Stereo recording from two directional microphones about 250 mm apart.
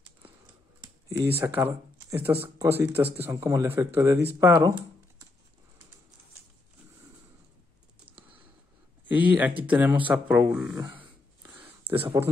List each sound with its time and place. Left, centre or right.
1.0 s a sound: centre
1.4 s speech: centre
8.0 s computer keyboard: right
9.1 s speech: centre